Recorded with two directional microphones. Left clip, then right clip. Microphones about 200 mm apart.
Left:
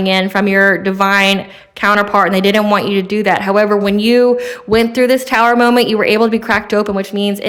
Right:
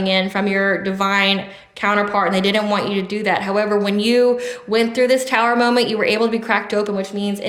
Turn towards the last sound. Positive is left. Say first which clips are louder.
# left 6 dB
turn(degrees=45)  # may be behind; listen again after turning